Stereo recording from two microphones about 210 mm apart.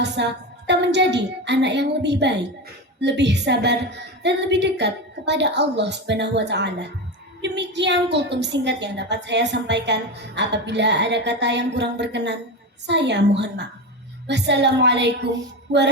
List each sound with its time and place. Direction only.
0.0 s a woman's voice: 55° right (ahead or behind)
15.7 s music: 55° right (ahead or behind)